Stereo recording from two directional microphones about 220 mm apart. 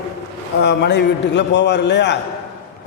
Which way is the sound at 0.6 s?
50° left (ahead or behind).